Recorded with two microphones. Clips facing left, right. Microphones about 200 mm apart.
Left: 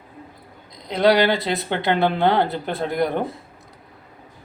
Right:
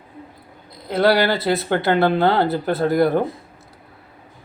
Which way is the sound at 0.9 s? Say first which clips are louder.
Even; 20° left (ahead or behind).